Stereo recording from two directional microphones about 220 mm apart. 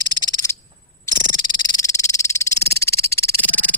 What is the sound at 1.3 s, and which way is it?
Frog, 20° left (ahead or behind).